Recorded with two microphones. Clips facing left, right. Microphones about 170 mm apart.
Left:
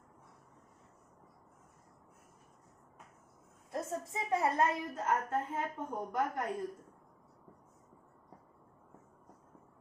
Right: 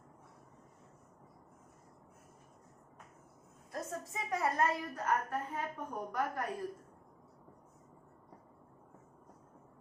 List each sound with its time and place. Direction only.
3.7 s a woman's voice: 25° left (ahead or behind)